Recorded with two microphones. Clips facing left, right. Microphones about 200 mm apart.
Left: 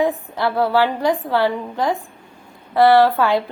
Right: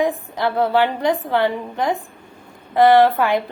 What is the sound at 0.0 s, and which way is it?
A woman's voice, 20° right (ahead or behind).